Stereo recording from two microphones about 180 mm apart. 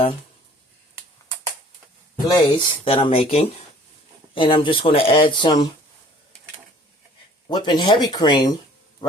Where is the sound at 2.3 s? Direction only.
25° left (ahead or behind).